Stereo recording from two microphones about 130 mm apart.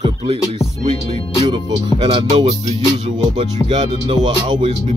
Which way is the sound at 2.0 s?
45° right (ahead or behind).